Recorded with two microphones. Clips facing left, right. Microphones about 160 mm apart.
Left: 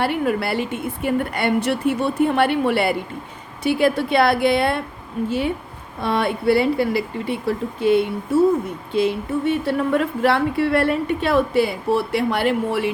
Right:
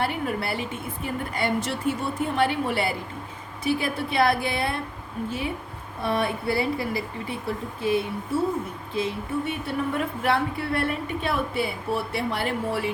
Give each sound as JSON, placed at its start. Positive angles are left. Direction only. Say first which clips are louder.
{"t": 0.0, "sound": "a woman's voice", "louder": "left 6 dB", "side_deg": 80}
{"t": 6.0, "sound": "a woman's voice", "louder": "left 4 dB", "side_deg": 80}